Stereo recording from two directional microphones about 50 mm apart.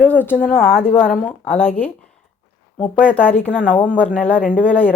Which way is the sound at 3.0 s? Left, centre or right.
Left.